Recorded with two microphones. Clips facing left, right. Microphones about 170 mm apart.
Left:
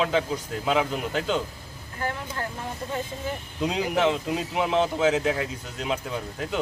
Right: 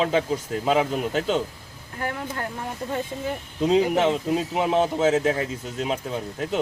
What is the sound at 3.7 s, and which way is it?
A man's voice, 25° right (ahead or behind).